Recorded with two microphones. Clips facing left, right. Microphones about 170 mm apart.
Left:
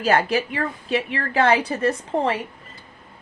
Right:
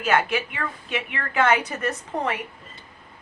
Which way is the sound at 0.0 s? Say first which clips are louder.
Left 3 dB; 35° left (ahead or behind).